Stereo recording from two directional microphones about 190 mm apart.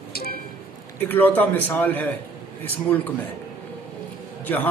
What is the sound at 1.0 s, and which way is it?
Speech, 10° left (ahead or behind).